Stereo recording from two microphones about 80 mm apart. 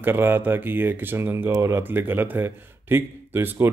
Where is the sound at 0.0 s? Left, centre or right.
Right.